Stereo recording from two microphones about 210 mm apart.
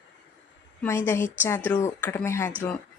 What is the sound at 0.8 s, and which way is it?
A woman's voice, 10° left (ahead or behind).